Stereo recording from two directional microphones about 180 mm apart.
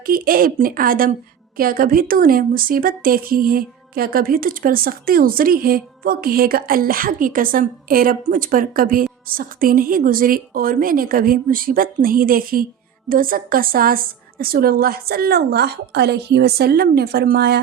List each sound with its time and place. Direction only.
0.0 s a woman's voice: 55° right (ahead or behind)